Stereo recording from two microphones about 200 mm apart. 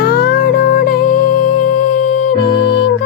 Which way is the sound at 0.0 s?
50° left (ahead or behind).